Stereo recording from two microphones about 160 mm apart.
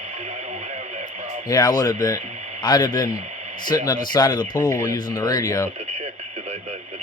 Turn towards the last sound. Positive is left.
turn(degrees=20)  # may be behind; listen again after turning